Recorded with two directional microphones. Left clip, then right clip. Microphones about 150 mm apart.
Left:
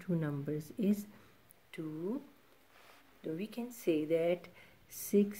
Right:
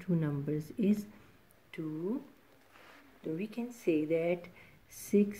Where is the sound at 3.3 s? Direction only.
15° left (ahead or behind).